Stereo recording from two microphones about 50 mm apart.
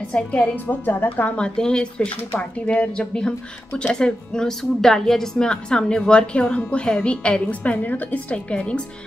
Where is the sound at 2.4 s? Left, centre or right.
Left.